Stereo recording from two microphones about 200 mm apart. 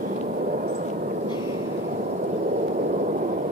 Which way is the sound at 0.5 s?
45° right (ahead or behind).